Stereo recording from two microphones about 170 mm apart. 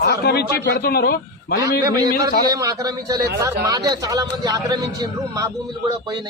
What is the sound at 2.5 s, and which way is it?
Speech, 20° right (ahead or behind).